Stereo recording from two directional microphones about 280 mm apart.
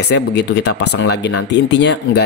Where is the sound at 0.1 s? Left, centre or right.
Left.